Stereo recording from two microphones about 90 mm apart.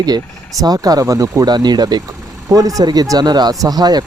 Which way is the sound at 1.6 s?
50° right (ahead or behind).